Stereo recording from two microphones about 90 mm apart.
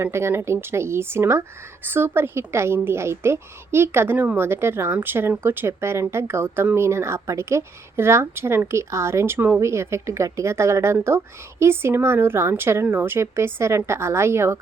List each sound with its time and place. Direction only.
0.0 s speech: 30° right (ahead or behind)